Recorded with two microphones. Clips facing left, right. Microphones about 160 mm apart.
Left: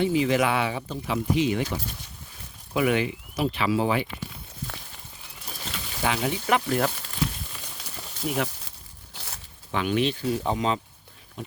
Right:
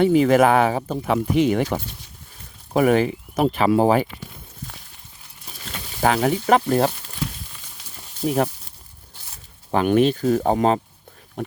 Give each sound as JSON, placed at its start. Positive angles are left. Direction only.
{"t": 0.0, "sound": "speech", "side_deg": -50}
{"t": 2.7, "sound": "speech", "side_deg": -40}
{"t": 6.0, "sound": "speech", "side_deg": -45}
{"t": 8.2, "sound": "speech", "side_deg": -40}
{"t": 9.1, "sound": "zipper", "side_deg": 80}
{"t": 9.7, "sound": "speech", "side_deg": -45}